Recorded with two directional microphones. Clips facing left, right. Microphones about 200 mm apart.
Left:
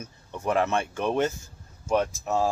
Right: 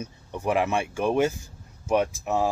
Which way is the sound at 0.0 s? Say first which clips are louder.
Right 2 dB; 15° right (ahead or behind).